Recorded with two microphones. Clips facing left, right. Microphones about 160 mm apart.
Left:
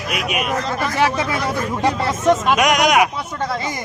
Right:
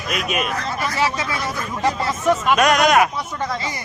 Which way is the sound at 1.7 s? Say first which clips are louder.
Right 1 dB; 20° left (ahead or behind).